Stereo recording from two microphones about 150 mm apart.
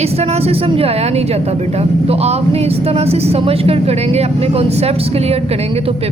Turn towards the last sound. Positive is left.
turn(degrees=-40)  # may be behind; listen again after turning